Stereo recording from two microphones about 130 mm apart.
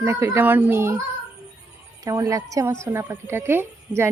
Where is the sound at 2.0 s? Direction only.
25° right (ahead or behind).